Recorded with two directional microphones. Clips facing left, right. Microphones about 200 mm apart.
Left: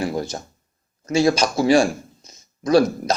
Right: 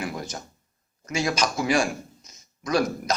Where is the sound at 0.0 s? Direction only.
30° left (ahead or behind).